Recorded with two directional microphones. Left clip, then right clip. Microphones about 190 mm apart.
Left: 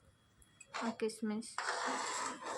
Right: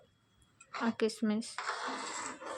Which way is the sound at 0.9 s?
30° right (ahead or behind).